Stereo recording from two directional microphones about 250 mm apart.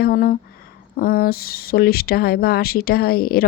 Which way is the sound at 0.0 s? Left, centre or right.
Left.